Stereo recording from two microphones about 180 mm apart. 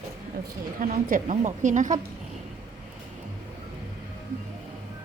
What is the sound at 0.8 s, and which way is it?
A woman's voice, 50° right (ahead or behind).